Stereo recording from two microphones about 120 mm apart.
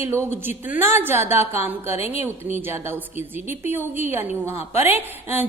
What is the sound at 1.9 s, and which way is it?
Speech, 60° left (ahead or behind).